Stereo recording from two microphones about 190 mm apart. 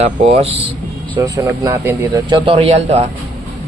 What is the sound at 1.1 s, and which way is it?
Speech, 20° right (ahead or behind).